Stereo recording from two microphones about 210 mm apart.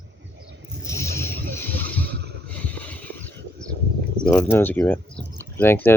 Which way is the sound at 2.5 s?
5° left (ahead or behind).